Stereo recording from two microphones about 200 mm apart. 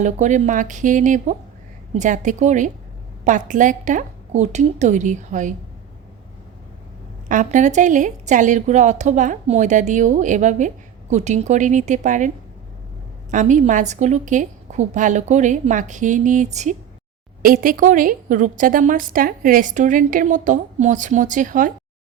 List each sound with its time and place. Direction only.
0.0 s a woman's voice: 35° right (ahead or behind)
7.3 s a woman's voice: 40° right (ahead or behind)
13.3 s a woman's voice: 40° right (ahead or behind)